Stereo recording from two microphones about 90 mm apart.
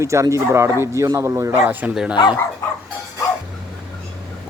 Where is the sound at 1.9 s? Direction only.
10° right (ahead or behind).